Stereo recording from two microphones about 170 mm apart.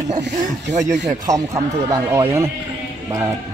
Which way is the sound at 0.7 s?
45° right (ahead or behind).